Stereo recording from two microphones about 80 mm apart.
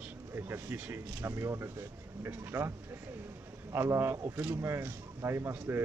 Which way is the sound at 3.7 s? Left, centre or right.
Right.